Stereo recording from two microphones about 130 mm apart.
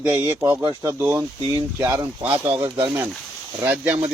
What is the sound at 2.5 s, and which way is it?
Speech, 45° right (ahead or behind).